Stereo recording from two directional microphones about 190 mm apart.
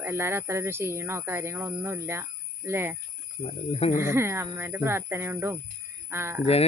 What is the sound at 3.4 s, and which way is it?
Speech, 30° left (ahead or behind).